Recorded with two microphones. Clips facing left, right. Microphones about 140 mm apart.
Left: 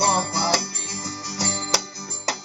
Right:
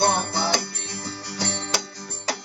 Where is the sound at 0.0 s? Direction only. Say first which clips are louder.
Even; 35° left (ahead or behind).